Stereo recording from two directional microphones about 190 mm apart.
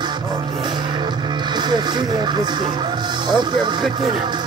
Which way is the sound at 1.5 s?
25° right (ahead or behind).